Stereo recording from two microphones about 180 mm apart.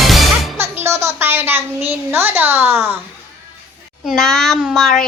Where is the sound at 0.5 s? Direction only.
15° right (ahead or behind).